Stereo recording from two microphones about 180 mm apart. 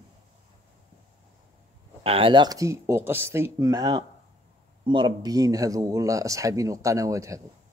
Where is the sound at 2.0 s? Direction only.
30° right (ahead or behind).